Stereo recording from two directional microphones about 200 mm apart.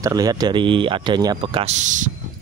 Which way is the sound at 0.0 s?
20° right (ahead or behind).